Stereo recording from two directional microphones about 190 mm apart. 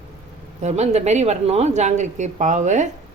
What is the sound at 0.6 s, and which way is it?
Speech, 35° right (ahead or behind).